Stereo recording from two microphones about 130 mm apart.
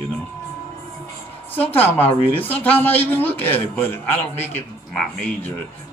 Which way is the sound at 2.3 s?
15° left (ahead or behind).